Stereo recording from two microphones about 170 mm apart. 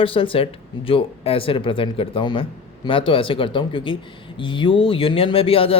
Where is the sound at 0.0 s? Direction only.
30° left (ahead or behind).